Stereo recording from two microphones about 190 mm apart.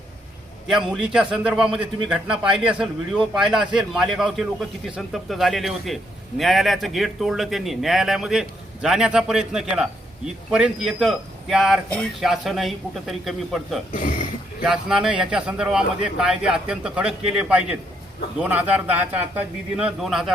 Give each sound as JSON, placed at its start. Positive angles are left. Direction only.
{"t": 0.7, "sound": "a man's voice", "side_deg": -5}
{"t": 13.9, "sound": "speech", "side_deg": 45}
{"t": 14.6, "sound": "a man's voice", "side_deg": -5}